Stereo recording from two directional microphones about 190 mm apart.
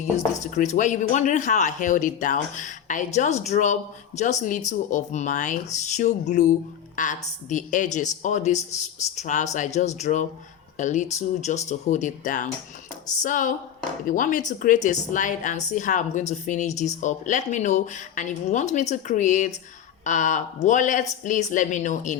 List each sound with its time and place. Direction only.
0.5 s a woman's voice: 40° left (ahead or behind)